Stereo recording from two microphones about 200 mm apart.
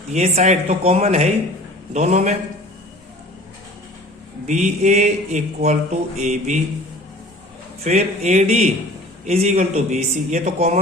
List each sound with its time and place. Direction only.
0.1 s speech: 35° right (ahead or behind)
4.4 s speech: 35° right (ahead or behind)
7.9 s speech: 35° right (ahead or behind)